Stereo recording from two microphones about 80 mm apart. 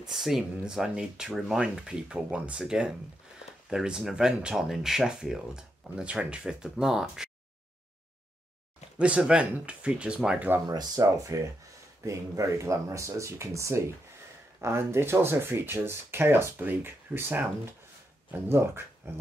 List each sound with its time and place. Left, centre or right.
0.0 s speech: centre
8.9 s speech: centre
10.7 s speech: right